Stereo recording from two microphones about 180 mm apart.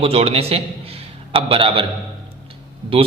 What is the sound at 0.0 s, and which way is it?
A man's voice, 35° right (ahead or behind).